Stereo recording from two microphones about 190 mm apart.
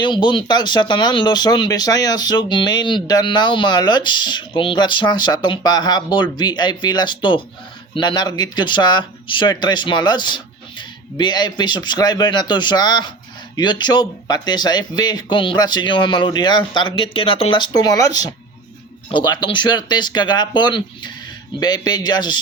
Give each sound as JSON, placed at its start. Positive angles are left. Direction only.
{"t": 0.0, "sound": "speech", "side_deg": 25}